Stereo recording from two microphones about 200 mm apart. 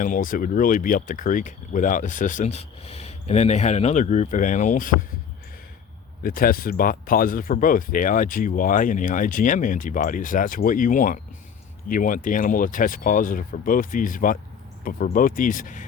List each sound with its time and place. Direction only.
0.0 s speech: 45° left (ahead or behind)
6.2 s speech: 45° left (ahead or behind)